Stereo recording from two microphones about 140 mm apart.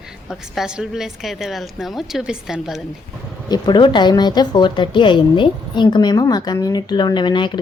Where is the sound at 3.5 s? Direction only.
30° left (ahead or behind).